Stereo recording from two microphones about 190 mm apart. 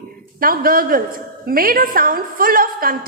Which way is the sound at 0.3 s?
50° right (ahead or behind).